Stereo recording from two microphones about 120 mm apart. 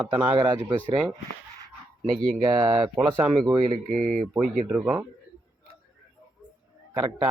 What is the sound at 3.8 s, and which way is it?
Speech, 90° right.